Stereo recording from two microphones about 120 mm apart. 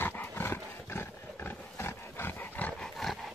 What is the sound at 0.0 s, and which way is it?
Roar, 20° left (ahead or behind).